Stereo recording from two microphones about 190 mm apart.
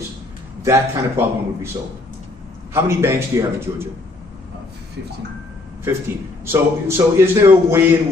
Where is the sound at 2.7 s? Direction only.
15° right (ahead or behind).